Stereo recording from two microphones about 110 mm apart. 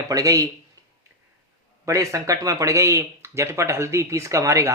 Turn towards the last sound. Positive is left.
turn(degrees=-30)  # may be behind; listen again after turning